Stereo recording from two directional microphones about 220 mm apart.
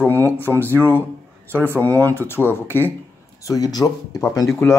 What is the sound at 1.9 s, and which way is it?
Speech, 15° right (ahead or behind).